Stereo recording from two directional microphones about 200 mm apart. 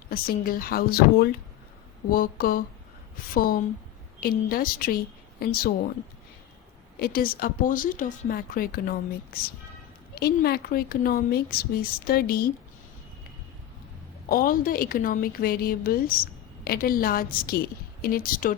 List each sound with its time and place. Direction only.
0.1 s a woman's voice: 45° left (ahead or behind)
7.0 s a woman's voice: 45° left (ahead or behind)
14.3 s a woman's voice: 45° left (ahead or behind)